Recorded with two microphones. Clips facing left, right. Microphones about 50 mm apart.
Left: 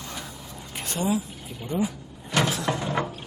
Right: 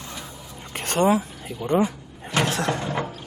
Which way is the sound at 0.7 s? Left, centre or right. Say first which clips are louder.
Right 7 dB; right.